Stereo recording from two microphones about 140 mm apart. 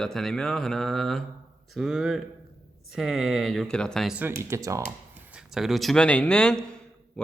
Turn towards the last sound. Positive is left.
turn(degrees=5)  # may be behind; listen again after turning